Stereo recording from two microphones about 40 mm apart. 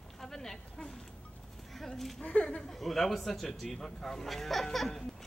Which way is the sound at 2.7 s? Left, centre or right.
Centre.